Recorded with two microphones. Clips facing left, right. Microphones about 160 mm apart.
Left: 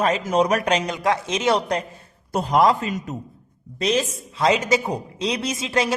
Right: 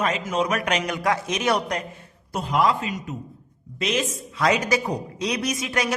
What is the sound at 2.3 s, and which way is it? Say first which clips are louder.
A man's voice: left 4 dB; 40° left (ahead or behind).